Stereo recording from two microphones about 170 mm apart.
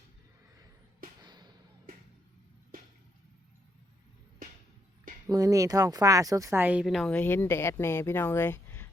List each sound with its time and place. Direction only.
1.2 s fireworks: 25° right (ahead or behind)
5.3 s speech: 20° right (ahead or behind); by 8.9 s 15° left (ahead or behind)